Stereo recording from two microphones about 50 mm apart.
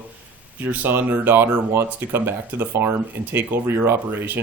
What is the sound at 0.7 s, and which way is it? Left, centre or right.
Speech, right.